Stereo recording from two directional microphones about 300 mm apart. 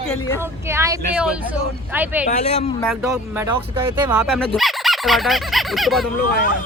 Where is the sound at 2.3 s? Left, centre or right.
Left.